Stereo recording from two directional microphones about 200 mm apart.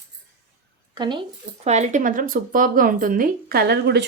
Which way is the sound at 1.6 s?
35° right (ahead or behind).